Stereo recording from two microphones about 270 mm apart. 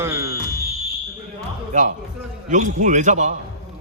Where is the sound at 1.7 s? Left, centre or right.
Right.